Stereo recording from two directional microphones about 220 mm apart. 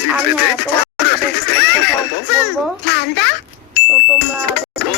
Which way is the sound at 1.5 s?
50° left (ahead or behind).